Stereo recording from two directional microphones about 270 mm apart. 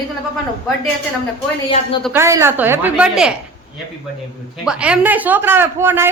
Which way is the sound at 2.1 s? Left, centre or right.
Centre.